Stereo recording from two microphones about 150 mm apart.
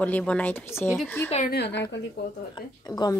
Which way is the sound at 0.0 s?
10° left (ahead or behind).